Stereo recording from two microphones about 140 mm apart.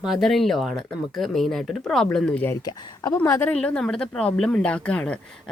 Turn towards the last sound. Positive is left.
turn(degrees=10)  # may be behind; listen again after turning